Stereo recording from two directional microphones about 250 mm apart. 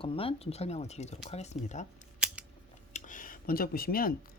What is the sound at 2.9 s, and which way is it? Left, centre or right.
Speech, left.